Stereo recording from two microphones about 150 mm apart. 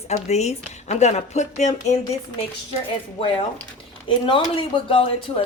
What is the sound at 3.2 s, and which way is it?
Speech, 35° left (ahead or behind).